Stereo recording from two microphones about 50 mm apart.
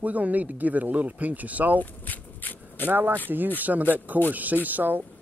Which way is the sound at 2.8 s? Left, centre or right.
Right.